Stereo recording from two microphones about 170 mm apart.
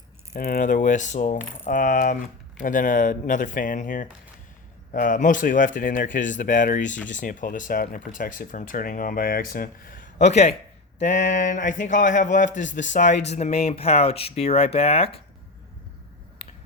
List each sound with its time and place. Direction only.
0.3 s speech: 55° left (ahead or behind); by 15.2 s 35° left (ahead or behind)